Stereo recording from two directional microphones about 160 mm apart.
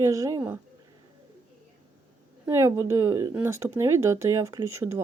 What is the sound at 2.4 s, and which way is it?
Speech, 15° right (ahead or behind).